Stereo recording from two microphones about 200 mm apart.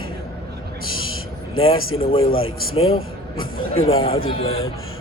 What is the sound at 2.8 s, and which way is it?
Speech, 90° left.